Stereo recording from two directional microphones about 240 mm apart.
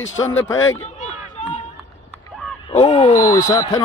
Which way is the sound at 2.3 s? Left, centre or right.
Centre.